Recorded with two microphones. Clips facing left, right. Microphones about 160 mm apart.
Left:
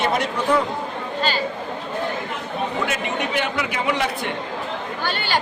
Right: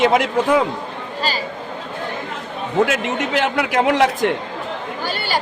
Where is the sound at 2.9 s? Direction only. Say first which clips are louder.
Right 4 dB; 90° right.